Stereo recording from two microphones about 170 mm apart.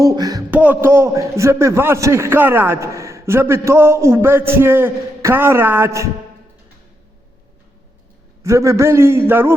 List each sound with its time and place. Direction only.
0.0 s a sound: 20° right (ahead or behind)
0.5 s a man's voice: 10° right (ahead or behind)
8.4 s a man's voice: 15° right (ahead or behind)